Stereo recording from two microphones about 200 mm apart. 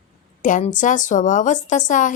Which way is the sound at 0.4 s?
40° left (ahead or behind).